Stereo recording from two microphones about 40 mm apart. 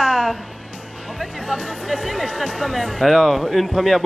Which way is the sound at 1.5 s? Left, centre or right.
Left.